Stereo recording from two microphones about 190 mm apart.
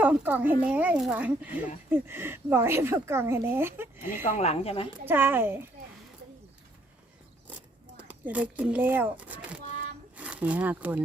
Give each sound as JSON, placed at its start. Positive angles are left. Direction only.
{"t": 0.0, "sound": "speech", "side_deg": -10}
{"t": 4.2, "sound": "speech", "side_deg": 35}
{"t": 5.0, "sound": "speech", "side_deg": -10}
{"t": 7.9, "sound": "speech", "side_deg": -10}